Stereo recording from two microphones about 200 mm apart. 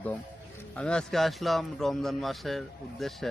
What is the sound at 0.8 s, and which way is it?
A man's voice, 5° left (ahead or behind).